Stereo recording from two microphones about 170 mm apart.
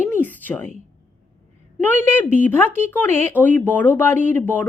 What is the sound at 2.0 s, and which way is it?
Speech, 10° left (ahead or behind).